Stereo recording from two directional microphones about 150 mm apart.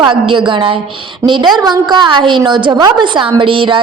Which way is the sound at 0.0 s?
30° right (ahead or behind).